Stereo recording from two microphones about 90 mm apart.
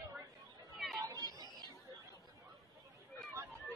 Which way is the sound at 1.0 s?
40° right (ahead or behind).